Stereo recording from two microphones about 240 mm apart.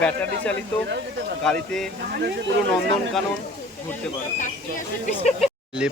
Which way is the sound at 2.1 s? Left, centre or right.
Right.